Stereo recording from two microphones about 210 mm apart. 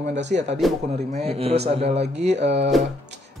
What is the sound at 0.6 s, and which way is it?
Speech, centre (ahead or behind).